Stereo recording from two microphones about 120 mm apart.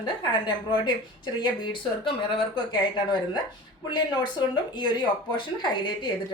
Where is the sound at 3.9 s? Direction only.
40° left (ahead or behind).